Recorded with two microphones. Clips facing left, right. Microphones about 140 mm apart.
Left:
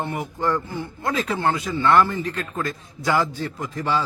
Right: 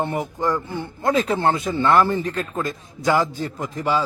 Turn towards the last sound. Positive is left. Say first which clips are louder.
# right 2 dB
turn(degrees=-15)  # may be behind; listen again after turning